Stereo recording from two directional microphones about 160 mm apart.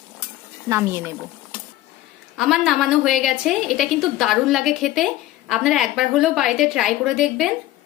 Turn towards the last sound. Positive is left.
turn(degrees=-5)  # may be behind; listen again after turning